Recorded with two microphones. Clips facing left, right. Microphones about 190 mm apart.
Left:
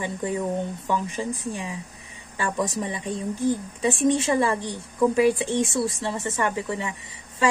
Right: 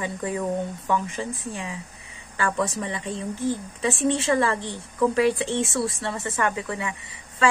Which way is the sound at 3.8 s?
15° left (ahead or behind).